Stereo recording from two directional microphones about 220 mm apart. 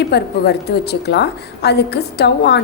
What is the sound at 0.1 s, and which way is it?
A woman's voice, 50° left (ahead or behind).